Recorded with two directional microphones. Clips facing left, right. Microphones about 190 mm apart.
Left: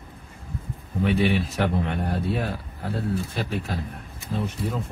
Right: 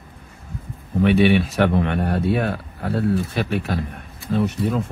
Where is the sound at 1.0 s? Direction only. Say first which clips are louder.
Right 6 dB; 75° right (ahead or behind).